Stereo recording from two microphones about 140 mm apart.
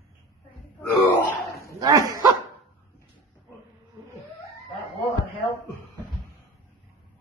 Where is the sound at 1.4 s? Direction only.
90° left.